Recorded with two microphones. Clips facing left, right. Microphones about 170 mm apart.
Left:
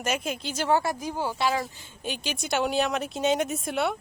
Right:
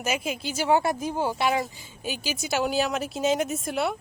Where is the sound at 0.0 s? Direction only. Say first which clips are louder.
Right 1 dB; 10° right (ahead or behind).